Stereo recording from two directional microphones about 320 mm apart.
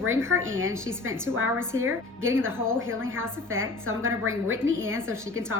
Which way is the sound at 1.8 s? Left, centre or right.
Right.